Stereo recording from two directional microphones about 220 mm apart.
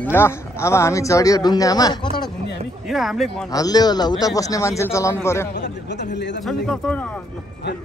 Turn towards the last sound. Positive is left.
turn(degrees=5)  # may be behind; listen again after turning